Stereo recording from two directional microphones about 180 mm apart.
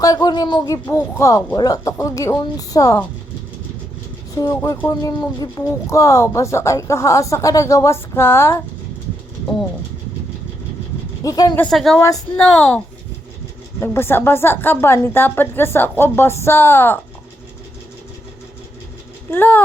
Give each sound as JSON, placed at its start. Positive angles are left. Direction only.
{"t": 0.0, "sound": "speech", "side_deg": 20}
{"t": 4.4, "sound": "speech", "side_deg": 20}
{"t": 11.2, "sound": "speech", "side_deg": 20}
{"t": 11.6, "sound": "a woman's voice", "side_deg": 0}
{"t": 13.7, "sound": "speech", "side_deg": 15}
{"t": 19.3, "sound": "speech", "side_deg": 10}